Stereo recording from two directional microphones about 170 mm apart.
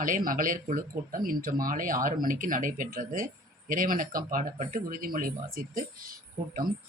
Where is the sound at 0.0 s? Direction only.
55° right (ahead or behind).